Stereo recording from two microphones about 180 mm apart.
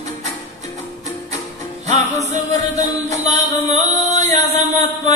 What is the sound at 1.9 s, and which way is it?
Music, 40° right (ahead or behind).